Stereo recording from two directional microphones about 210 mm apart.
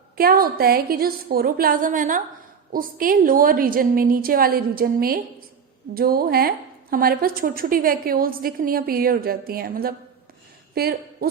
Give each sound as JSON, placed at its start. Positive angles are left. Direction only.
{"t": 0.2, "sound": "a woman's voice", "side_deg": -45}